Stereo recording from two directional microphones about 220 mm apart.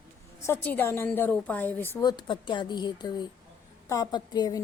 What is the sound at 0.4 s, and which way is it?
A woman's voice, 10° left (ahead or behind).